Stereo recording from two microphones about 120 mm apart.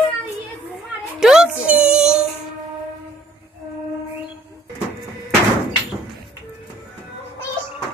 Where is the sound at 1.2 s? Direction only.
5° right (ahead or behind).